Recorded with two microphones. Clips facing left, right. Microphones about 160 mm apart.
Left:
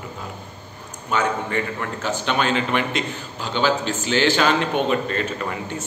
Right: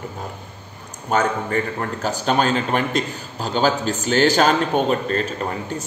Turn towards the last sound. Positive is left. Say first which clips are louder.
# right 2 dB
turn(degrees=-35)  # may be behind; listen again after turning